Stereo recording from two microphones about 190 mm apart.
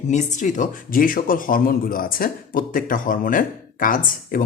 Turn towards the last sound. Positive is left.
turn(degrees=45)  # may be behind; listen again after turning